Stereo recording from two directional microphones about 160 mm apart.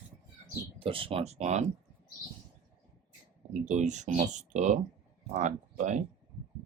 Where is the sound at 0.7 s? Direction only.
35° right (ahead or behind).